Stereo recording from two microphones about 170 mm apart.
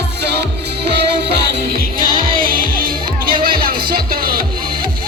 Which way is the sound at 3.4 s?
60° right (ahead or behind).